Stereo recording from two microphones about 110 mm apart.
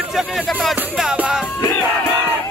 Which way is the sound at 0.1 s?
Centre (ahead or behind).